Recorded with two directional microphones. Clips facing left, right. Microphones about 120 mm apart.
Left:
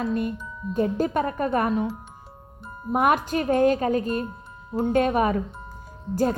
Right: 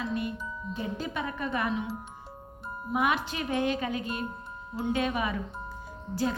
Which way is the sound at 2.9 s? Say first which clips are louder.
Left 7 dB; 50° left (ahead or behind).